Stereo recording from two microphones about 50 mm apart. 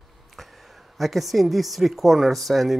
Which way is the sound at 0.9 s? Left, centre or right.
Centre.